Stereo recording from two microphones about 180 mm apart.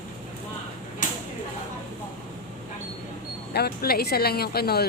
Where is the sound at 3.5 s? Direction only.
60° left (ahead or behind).